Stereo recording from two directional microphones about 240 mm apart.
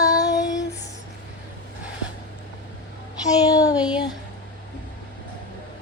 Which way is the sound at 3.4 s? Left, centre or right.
Centre.